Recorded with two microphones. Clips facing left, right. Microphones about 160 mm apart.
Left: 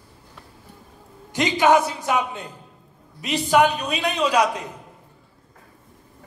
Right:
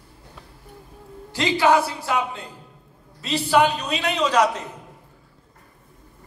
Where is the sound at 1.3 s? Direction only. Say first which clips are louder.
Left 1 dB; 20° left (ahead or behind).